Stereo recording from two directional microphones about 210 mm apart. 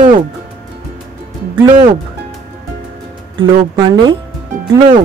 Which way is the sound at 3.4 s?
20° right (ahead or behind).